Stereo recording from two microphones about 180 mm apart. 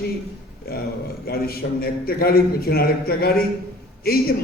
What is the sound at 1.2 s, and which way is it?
A man's voice, 55° left (ahead or behind).